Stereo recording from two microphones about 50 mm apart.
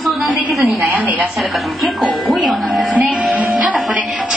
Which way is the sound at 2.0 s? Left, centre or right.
Centre.